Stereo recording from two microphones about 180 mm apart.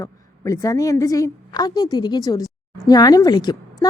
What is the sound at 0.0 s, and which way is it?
A woman's voice, 15° left (ahead or behind).